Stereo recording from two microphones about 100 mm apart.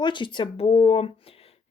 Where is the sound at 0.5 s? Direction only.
65° left (ahead or behind).